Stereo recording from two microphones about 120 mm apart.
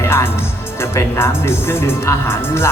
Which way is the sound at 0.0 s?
20° left (ahead or behind).